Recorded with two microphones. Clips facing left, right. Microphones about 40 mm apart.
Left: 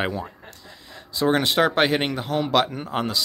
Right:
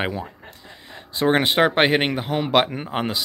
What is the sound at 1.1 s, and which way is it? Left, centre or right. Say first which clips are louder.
Speech: right 2 dB; right.